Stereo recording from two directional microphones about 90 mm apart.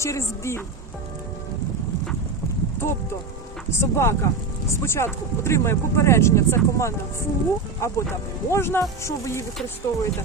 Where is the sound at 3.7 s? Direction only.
30° left (ahead or behind).